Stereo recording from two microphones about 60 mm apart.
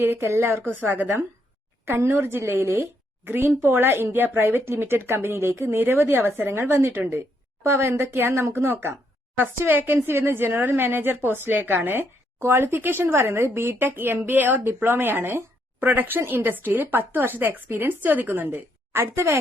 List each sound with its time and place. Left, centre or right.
0.0 s a woman's voice: right
15.8 s speech: right